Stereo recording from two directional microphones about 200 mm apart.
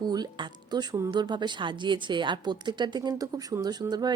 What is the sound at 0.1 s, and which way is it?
Speech, 20° right (ahead or behind).